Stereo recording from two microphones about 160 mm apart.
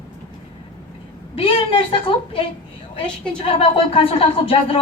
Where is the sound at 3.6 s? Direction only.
35° left (ahead or behind).